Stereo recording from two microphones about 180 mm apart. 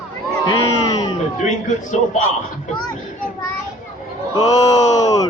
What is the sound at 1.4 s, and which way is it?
Speech, 40° left (ahead or behind).